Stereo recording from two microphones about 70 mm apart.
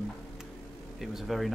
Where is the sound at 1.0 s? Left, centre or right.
Centre.